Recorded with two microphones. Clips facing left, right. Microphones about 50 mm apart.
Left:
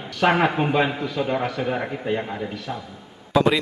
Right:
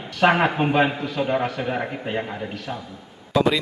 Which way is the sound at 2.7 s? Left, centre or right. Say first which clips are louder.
Right 1 dB; centre.